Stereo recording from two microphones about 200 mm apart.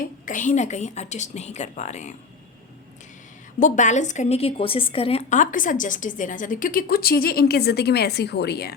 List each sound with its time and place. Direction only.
0.3 s a woman's voice: 40° left (ahead or behind)
3.6 s a woman's voice: 40° left (ahead or behind); by 8.7 s 55° left (ahead or behind)